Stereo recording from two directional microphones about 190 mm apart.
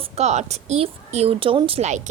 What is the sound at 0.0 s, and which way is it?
A woman's voice, 35° right (ahead or behind).